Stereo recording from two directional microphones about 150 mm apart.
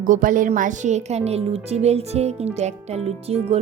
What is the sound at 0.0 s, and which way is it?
A woman's voice, 60° right (ahead or behind).